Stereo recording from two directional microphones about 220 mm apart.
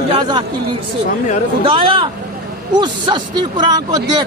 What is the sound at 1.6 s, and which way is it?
Speech, 25° right (ahead or behind).